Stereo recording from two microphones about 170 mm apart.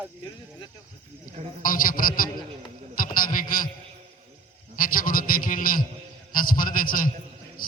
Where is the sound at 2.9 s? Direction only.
55° left (ahead or behind).